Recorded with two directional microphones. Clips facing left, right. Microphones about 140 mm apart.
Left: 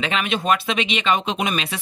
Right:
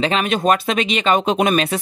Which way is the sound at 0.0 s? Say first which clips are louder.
Right 5 dB; 40° right (ahead or behind).